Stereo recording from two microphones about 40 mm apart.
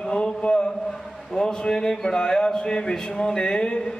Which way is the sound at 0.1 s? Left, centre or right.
Left.